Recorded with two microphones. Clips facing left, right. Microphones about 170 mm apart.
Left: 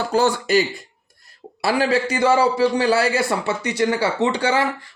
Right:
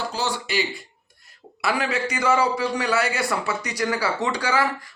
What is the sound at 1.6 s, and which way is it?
A man's voice, 30° left (ahead or behind).